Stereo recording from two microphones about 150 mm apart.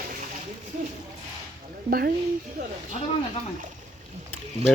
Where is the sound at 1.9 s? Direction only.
85° right.